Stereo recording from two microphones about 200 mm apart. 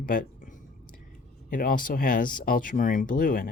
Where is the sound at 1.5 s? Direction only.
45° left (ahead or behind).